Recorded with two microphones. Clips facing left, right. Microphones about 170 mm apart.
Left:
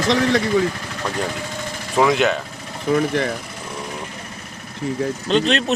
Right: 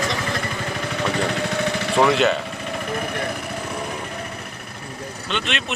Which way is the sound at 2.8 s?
90° left.